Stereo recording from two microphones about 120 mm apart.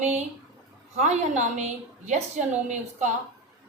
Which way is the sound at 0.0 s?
75° right (ahead or behind).